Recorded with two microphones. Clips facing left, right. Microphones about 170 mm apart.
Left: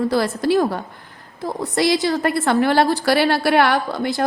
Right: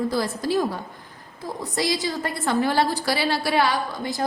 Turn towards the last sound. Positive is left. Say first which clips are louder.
# left 6 dB
turn(degrees=70)  # may be behind; listen again after turning